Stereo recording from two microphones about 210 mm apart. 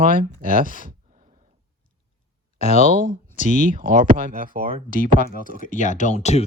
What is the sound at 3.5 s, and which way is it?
Speech, 40° right (ahead or behind).